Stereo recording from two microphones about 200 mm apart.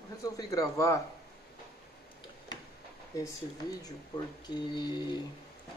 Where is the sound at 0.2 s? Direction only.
15° left (ahead or behind).